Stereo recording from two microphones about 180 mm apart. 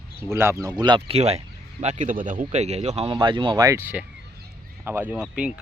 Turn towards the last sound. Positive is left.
turn(degrees=-5)  # may be behind; listen again after turning